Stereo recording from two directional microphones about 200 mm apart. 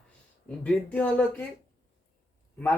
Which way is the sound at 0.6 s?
5° left (ahead or behind).